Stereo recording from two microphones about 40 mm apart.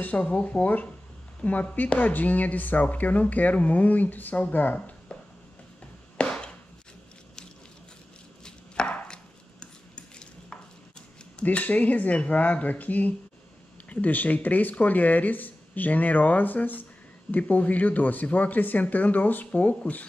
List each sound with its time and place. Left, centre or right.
0.0 s speech: left
4.7 s a sound: left
6.1 s chopping: left
8.5 s chopping: left
9.0 s dishes: left
11.4 s speech: left